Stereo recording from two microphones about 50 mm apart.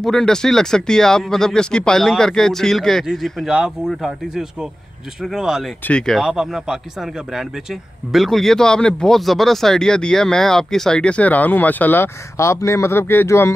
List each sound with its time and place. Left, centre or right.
0.0 s speech: centre
3.4 s speech: centre
5.8 s speech: left
6.2 s speech: centre
9.2 s speech: centre
11.0 s speech: left
12.4 s speech: left